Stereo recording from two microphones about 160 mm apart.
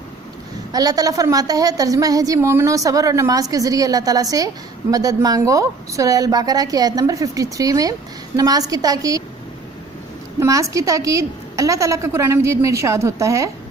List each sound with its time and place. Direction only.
0.7 s a woman's voice: 25° right (ahead or behind)
10.4 s a woman's voice: 20° right (ahead or behind)